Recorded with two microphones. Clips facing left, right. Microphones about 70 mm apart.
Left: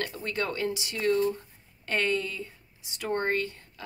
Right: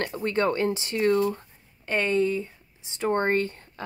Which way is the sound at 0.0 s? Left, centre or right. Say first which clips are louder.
Right 7 dB; right.